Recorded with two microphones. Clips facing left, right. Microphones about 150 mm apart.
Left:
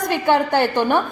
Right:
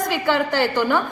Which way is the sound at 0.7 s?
25° left (ahead or behind).